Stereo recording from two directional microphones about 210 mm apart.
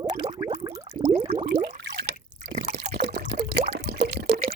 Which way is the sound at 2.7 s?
50° right (ahead or behind).